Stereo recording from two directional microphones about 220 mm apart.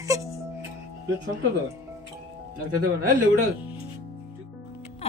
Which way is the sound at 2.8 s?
40° right (ahead or behind).